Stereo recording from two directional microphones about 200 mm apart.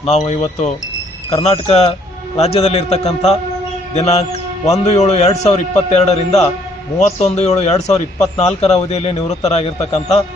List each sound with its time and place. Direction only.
0.0 s a man's voice: 35° left (ahead or behind)